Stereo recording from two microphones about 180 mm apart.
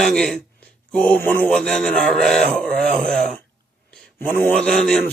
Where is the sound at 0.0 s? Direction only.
5° left (ahead or behind).